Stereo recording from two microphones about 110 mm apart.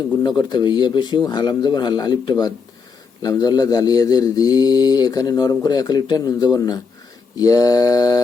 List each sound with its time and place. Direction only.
0.2 s speech: 40° left (ahead or behind)